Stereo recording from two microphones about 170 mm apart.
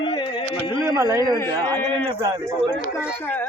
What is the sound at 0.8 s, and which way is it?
Speech, 15° right (ahead or behind).